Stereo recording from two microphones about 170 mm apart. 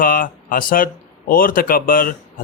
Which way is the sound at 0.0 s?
55° left (ahead or behind).